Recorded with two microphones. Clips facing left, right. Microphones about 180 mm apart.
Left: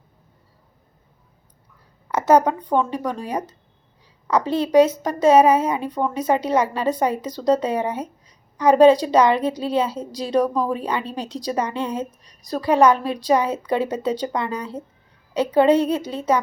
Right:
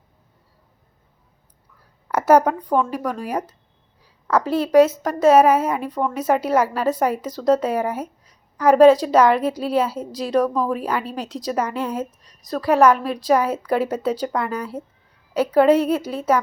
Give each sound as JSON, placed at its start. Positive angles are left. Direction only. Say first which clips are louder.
{"t": 2.0, "sound": "a woman's voice", "louder": "right 1 dB", "side_deg": -10}